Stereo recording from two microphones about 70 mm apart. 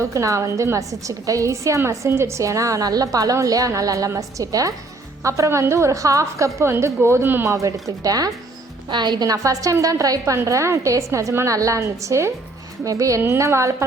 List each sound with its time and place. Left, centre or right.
0.0 s a woman's voice: right
6.7 s speech: right
7.4 s a woman's voice: right
8.9 s a woman's voice: right